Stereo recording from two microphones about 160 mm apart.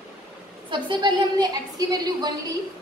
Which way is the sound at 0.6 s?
30° right (ahead or behind).